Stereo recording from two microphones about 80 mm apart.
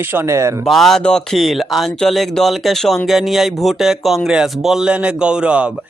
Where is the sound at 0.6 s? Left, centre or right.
Centre.